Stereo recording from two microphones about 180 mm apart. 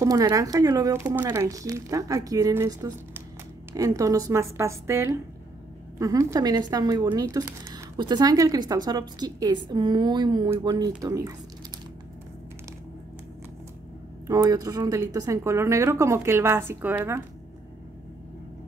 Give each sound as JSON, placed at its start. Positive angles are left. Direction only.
{"t": 0.0, "sound": "a woman's voice", "side_deg": -20}
{"t": 14.2, "sound": "a woman's voice", "side_deg": -20}